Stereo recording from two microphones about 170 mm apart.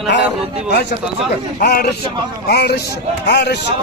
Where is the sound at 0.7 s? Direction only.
75° left (ahead or behind).